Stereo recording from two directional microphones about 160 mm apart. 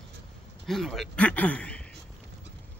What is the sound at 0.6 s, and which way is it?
Speech, centre (ahead or behind).